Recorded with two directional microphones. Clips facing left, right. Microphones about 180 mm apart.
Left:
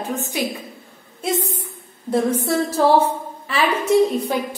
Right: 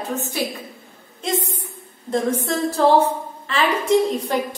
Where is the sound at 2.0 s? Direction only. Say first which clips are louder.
Left 2 dB; 10° left (ahead or behind).